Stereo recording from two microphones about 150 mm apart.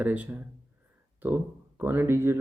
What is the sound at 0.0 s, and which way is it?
Speech, 10° right (ahead or behind).